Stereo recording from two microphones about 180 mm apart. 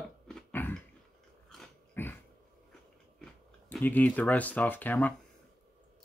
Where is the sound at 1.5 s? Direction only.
5° left (ahead or behind).